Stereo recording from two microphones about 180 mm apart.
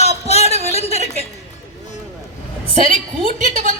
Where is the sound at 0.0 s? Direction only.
35° left (ahead or behind).